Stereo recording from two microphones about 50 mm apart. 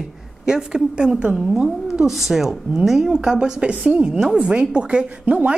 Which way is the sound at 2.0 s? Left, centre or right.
Centre.